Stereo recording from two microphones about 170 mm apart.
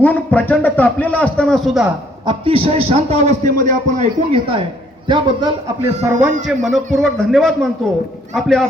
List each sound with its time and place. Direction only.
0.0 s a man's voice: 10° left (ahead or behind)
2.2 s a man's voice: 30° right (ahead or behind); by 4.0 s 50° right (ahead or behind)
4.3 s a man's voice: 30° right (ahead or behind)
6.0 s speech: 10° right (ahead or behind)
6.6 s speech: centre (ahead or behind)